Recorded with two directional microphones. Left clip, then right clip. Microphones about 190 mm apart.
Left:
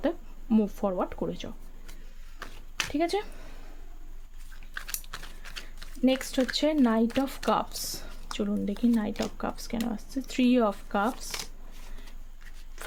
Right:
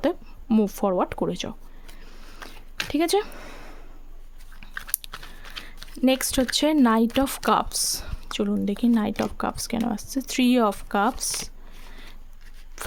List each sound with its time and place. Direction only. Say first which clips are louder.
0.0 s speech: right 5 dB; 35° right (ahead or behind)
2.9 s speech: right 7 dB; 50° right (ahead or behind)
4.6 s biting: right 7 dB; 60° right (ahead or behind)
6.0 s speech: right 4 dB; 45° right (ahead or behind)